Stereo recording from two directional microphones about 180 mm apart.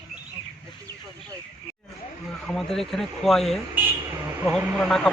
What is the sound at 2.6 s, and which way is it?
Speech, centre (ahead or behind).